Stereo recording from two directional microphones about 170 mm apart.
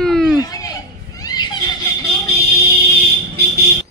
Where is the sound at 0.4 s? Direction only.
20° left (ahead or behind).